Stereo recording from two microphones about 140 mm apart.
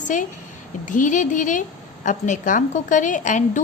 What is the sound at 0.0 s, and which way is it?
A woman's voice, 65° left (ahead or behind).